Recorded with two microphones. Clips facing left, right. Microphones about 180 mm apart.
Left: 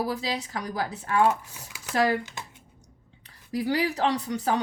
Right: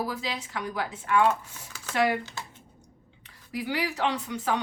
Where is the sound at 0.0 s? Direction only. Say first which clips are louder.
Left 3 dB; 35° left (ahead or behind).